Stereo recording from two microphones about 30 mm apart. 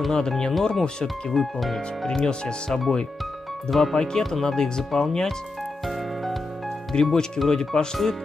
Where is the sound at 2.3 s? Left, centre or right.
Left.